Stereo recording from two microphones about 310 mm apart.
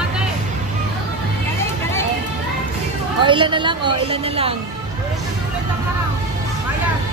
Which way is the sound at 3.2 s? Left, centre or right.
Centre.